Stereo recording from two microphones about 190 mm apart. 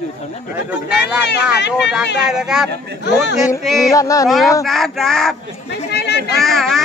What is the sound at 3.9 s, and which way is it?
Speech, 15° left (ahead or behind).